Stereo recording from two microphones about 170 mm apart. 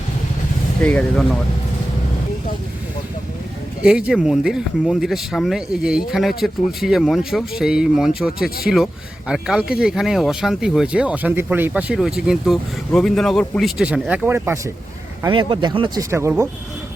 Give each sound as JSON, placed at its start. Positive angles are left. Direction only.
{"t": 0.8, "sound": "speech", "side_deg": 10}
{"t": 3.8, "sound": "speech", "side_deg": -5}
{"t": 15.3, "sound": "speech", "side_deg": -30}
{"t": 16.0, "sound": "speech", "side_deg": -15}